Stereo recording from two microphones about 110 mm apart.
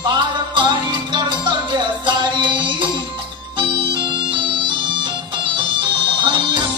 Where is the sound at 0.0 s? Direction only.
45° right (ahead or behind).